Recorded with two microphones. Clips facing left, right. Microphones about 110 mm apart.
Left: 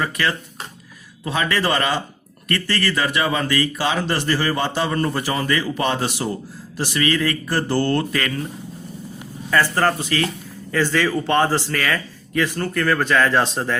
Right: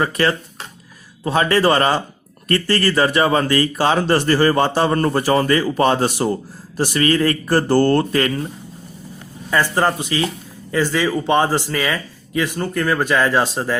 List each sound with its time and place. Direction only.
0.0 s speech: 35° right (ahead or behind)
9.5 s speech: 15° right (ahead or behind)